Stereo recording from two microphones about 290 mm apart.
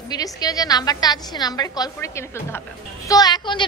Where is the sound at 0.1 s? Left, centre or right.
Centre.